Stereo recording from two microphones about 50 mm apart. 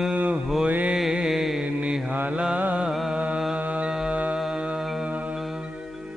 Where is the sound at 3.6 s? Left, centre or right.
Right.